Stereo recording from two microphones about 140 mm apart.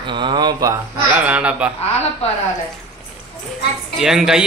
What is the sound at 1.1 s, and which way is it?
Speech, 10° right (ahead or behind).